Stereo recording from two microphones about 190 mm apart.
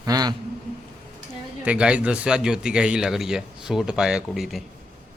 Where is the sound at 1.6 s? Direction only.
5° right (ahead or behind).